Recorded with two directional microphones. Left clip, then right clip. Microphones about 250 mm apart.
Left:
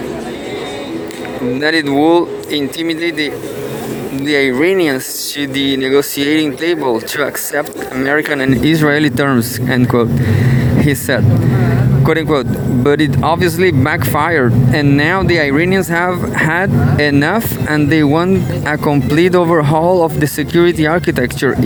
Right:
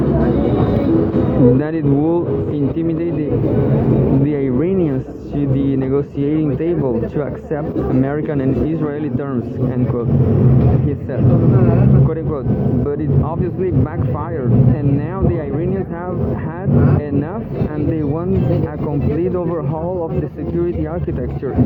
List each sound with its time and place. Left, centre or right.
1.6 s speech: left
4.3 s speech: left
8.6 s speech: left
12.0 s speech: left